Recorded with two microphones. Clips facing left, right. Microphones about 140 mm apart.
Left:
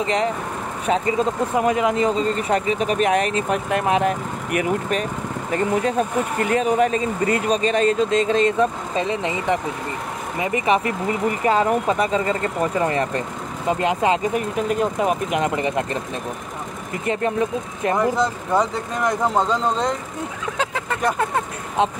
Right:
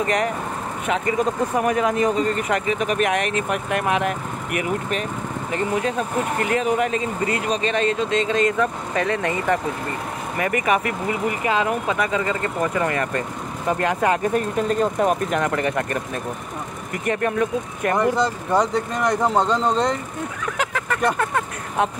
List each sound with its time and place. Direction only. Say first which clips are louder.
0.0 s speech: even; 25° left (ahead or behind)
11.4 s speech: left 4 dB; 40° left (ahead or behind); by 15.4 s 5° left (ahead or behind)
15.4 s speech: even; 20° left (ahead or behind)
17.0 s speech: even; 25° left (ahead or behind)
17.9 s speech: right 1 dB; centre (ahead or behind)
20.5 s speech: even; 30° left (ahead or behind)